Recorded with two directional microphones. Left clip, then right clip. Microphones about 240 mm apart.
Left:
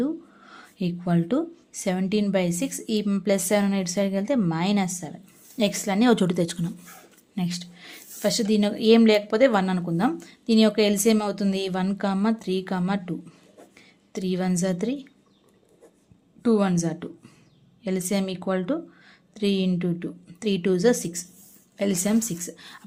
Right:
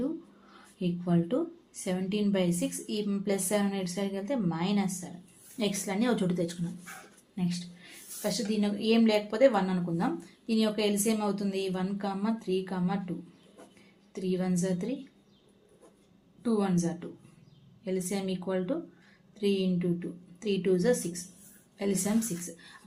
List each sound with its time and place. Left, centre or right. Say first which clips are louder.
0.5 s speech: left 4 dB; left
16.4 s speech: left 7 dB; left